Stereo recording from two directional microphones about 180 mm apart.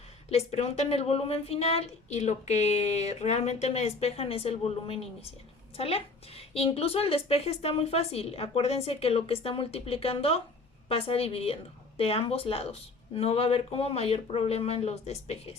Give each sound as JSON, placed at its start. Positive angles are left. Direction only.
{"t": 0.3, "sound": "speech", "side_deg": 35}